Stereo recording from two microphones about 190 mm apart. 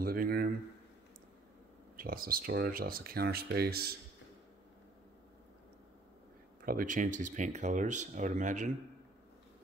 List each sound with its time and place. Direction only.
0.0 s a sound: 50° right (ahead or behind)
2.0 s speech: 50° right (ahead or behind)
6.6 s speech: 45° right (ahead or behind)